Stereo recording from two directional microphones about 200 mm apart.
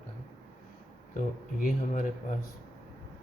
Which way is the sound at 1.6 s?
40° left (ahead or behind).